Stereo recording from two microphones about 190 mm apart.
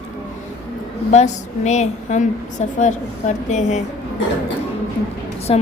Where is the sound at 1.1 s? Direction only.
35° left (ahead or behind).